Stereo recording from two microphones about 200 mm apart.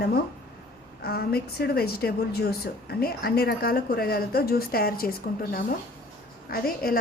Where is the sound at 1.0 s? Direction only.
50° left (ahead or behind).